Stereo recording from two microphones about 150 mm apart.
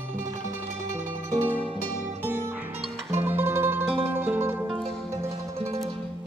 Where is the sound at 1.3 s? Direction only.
15° right (ahead or behind).